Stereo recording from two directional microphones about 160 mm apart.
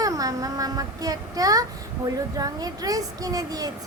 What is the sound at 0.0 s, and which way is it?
Speech, 20° right (ahead or behind).